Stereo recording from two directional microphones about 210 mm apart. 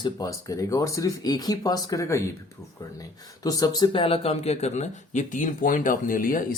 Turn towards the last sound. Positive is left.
turn(degrees=40)  # may be behind; listen again after turning